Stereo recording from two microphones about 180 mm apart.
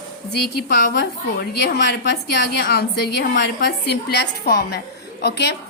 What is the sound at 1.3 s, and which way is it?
A woman's voice, 65° left (ahead or behind).